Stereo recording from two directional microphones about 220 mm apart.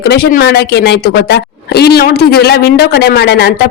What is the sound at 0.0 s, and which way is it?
Speech, 45° left (ahead or behind).